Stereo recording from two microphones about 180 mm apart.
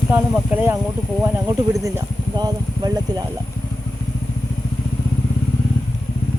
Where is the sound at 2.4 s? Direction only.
20° right (ahead or behind).